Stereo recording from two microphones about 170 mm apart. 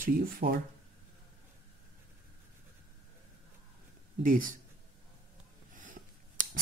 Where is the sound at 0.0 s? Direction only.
55° right (ahead or behind).